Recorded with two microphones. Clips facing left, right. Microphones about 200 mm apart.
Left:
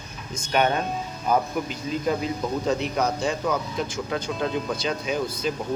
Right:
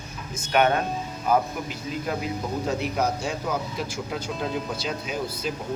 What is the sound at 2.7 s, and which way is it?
Speech, 5° right (ahead or behind).